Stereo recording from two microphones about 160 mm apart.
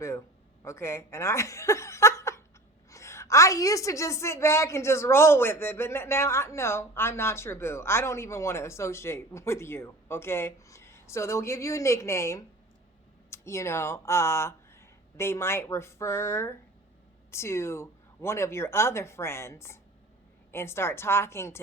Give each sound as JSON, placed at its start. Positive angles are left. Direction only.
{"t": 0.0, "sound": "a woman's voice", "side_deg": 15}